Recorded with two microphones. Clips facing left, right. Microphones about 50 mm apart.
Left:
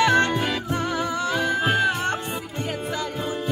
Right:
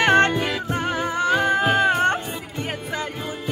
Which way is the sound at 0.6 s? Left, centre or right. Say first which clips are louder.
Right 1 dB; right.